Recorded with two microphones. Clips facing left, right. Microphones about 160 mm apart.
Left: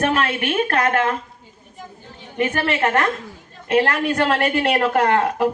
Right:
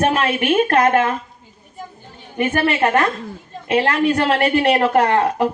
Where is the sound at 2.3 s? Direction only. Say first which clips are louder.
Right 3 dB; 15° right (ahead or behind).